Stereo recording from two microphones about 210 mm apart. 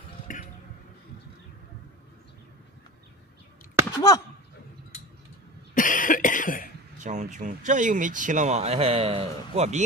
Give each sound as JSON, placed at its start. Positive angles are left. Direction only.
{"t": 3.9, "sound": "chop", "side_deg": 15}
{"t": 5.8, "sound": "cough", "side_deg": 40}
{"t": 7.0, "sound": "speech", "side_deg": -35}